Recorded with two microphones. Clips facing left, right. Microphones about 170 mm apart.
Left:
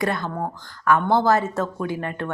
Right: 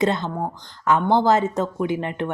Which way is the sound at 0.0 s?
20° right (ahead or behind).